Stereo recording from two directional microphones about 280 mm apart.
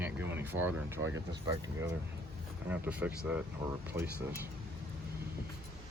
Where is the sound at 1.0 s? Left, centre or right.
Right.